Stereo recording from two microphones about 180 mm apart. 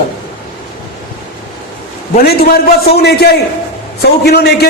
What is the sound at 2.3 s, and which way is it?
A man's voice, 60° left (ahead or behind).